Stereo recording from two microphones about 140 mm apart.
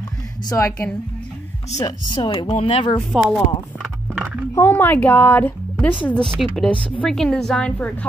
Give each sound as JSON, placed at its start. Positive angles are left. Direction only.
{"t": 0.5, "sound": "a woman's voice", "side_deg": 20}
{"t": 1.8, "sound": "speech", "side_deg": 30}
{"t": 3.1, "sound": "speech", "side_deg": -10}
{"t": 4.2, "sound": "a sound", "side_deg": -10}
{"t": 4.6, "sound": "a woman's voice", "side_deg": 15}